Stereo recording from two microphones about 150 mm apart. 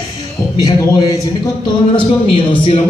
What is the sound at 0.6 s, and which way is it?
A man's voice, 25° left (ahead or behind).